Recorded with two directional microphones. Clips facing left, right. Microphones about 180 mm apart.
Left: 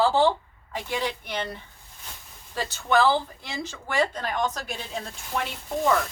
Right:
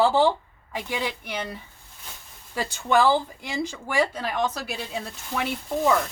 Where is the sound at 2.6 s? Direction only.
15° right (ahead or behind).